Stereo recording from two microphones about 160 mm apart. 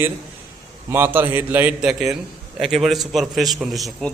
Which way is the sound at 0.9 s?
15° right (ahead or behind).